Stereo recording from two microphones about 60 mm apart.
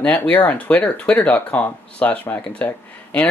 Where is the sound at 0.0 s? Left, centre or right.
Left.